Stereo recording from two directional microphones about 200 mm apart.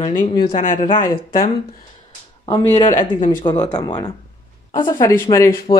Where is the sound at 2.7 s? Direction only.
40° left (ahead or behind).